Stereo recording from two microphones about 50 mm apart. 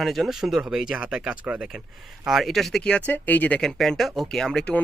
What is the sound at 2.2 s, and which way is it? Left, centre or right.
Speech, centre.